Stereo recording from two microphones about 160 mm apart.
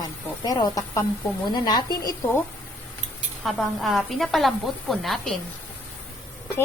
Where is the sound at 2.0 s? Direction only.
15° left (ahead or behind).